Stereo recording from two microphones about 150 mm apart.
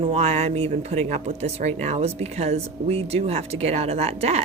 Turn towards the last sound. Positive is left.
turn(degrees=-45)  # may be behind; listen again after turning